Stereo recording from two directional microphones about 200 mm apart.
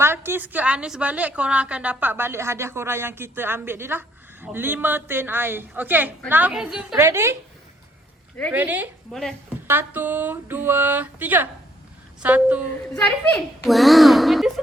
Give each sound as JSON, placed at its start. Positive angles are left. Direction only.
{"t": 0.0, "sound": "a woman's voice", "side_deg": -10}
{"t": 6.9, "sound": "a woman's voice", "side_deg": -15}
{"t": 8.5, "sound": "a woman's voice", "side_deg": -10}
{"t": 13.0, "sound": "a woman's voice", "side_deg": 5}